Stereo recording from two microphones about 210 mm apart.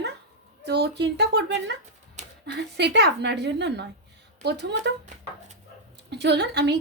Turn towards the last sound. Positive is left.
turn(degrees=-55)  # may be behind; listen again after turning